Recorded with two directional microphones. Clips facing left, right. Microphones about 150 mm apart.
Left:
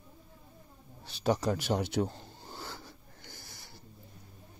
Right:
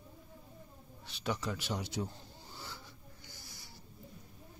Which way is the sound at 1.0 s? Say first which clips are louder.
Left 8 dB; 35° left (ahead or behind).